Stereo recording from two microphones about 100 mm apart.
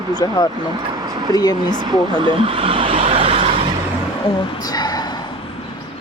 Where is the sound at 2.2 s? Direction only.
60° right (ahead or behind); by 3.6 s 90° right.